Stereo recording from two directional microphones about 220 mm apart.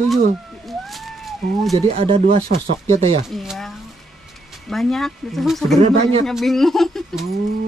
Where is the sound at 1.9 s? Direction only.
25° right (ahead or behind).